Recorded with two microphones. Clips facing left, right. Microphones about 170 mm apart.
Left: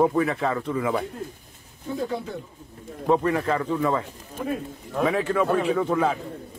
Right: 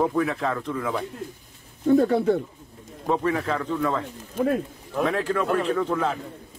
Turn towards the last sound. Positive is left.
turn(degrees=5)  # may be behind; listen again after turning